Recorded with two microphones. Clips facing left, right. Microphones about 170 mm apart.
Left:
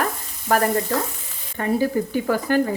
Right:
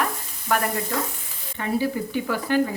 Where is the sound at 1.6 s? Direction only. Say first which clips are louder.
Left 4 dB; 45° left (ahead or behind).